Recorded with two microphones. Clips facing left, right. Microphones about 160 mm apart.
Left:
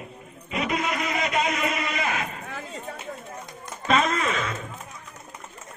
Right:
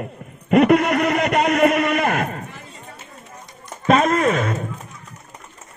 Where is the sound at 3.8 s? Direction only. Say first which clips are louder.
Right 7 dB; 45° right (ahead or behind).